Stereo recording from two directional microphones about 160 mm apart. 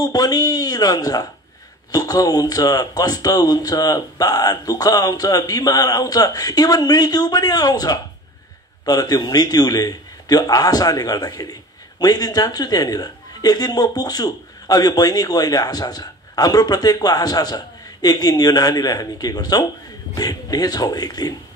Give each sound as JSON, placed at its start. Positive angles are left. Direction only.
{"t": 0.0, "sound": "a woman's voice", "side_deg": 25}